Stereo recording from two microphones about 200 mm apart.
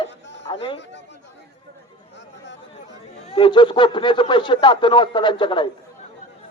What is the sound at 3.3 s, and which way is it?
A man's voice, 25° left (ahead or behind).